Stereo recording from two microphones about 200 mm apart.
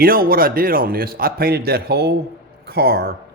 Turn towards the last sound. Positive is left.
turn(degrees=-55)  # may be behind; listen again after turning